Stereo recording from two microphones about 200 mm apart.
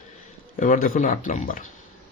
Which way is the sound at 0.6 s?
40° left (ahead or behind).